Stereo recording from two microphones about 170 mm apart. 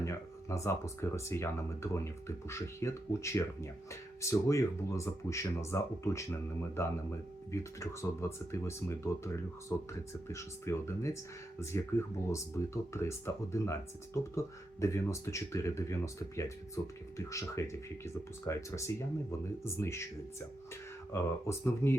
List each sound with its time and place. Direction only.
0.0 s a sound: 20° left (ahead or behind)
1.1 s speech: 15° left (ahead or behind)
21.1 s speech: 15° left (ahead or behind)